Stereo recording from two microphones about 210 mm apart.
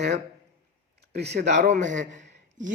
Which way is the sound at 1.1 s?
50° right (ahead or behind).